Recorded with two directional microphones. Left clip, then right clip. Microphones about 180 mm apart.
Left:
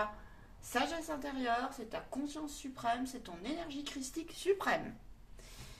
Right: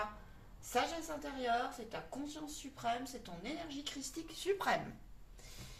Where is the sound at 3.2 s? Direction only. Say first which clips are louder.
Left 3 dB; 35° left (ahead or behind).